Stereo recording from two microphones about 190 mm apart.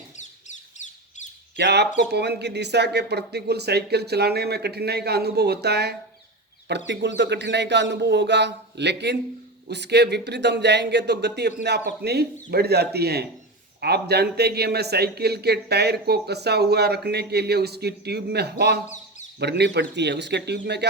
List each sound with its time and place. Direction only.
0.2 s bird: 40° left (ahead or behind)
1.5 s a man's voice: 60° right (ahead or behind)